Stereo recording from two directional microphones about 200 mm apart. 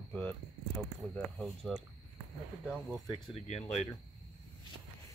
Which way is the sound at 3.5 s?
30° left (ahead or behind).